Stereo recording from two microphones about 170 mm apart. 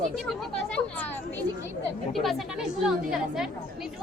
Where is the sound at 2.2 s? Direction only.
5° right (ahead or behind).